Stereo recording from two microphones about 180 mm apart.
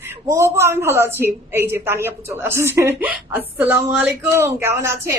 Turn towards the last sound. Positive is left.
turn(degrees=-15)  # may be behind; listen again after turning